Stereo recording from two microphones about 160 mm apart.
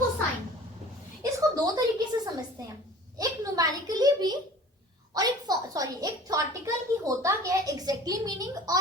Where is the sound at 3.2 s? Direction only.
20° right (ahead or behind).